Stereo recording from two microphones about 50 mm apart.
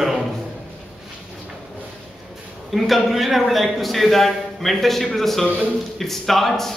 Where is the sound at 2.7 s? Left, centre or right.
Centre.